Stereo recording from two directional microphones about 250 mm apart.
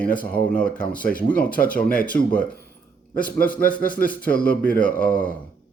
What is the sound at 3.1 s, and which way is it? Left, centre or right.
A man's voice, left.